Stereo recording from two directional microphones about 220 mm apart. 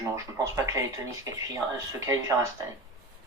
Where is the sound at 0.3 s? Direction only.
15° right (ahead or behind).